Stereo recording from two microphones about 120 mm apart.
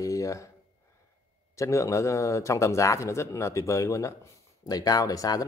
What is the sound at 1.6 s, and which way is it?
Speech, 25° left (ahead or behind).